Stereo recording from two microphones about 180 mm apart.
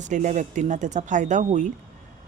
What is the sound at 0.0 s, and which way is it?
A woman's voice, 45° right (ahead or behind).